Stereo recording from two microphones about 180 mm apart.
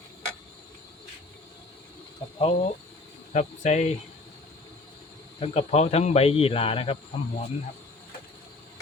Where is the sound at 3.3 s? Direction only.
40° left (ahead or behind).